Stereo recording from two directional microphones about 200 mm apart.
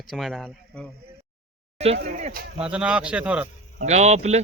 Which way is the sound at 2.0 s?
40° right (ahead or behind).